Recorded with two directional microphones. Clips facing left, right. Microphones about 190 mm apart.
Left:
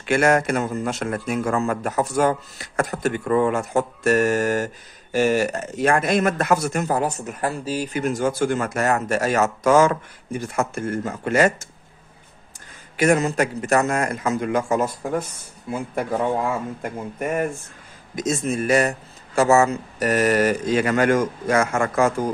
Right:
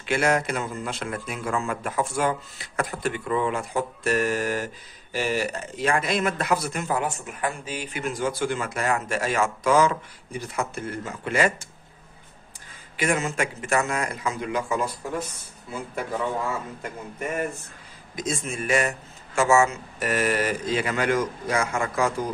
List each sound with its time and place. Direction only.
0.0 s speech: 50° left (ahead or behind)
12.9 s speech: 40° left (ahead or behind)
18.1 s speech: 45° left (ahead or behind)